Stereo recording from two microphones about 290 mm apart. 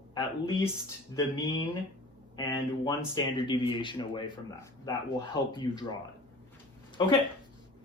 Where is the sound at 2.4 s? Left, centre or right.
Centre.